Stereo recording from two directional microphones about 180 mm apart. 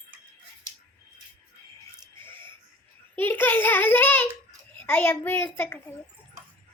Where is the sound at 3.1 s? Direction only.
10° left (ahead or behind).